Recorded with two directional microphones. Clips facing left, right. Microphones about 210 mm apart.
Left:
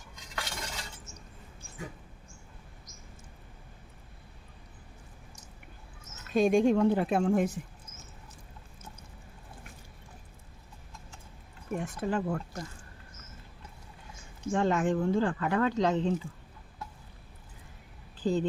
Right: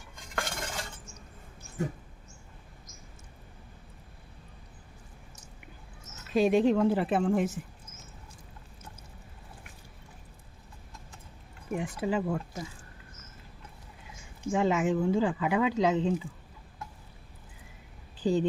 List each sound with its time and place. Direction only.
0.2 s cutlery: 50° right (ahead or behind)
6.3 s speech: 5° right (ahead or behind)
11.7 s speech: 10° right (ahead or behind)
14.5 s speech: 5° right (ahead or behind)
18.2 s speech: 15° right (ahead or behind)